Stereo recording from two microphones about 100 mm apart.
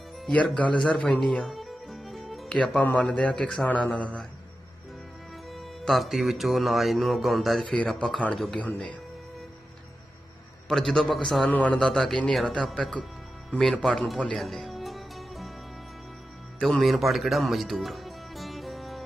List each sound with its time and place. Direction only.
0.3 s speech: 10° left (ahead or behind)
2.6 s a man's voice: 15° left (ahead or behind)
5.5 s a man's voice: centre (ahead or behind)
10.7 s a man's voice: centre (ahead or behind)
11.8 s speech: 5° left (ahead or behind)
14.4 s music: centre (ahead or behind)
16.6 s music: 5° left (ahead or behind)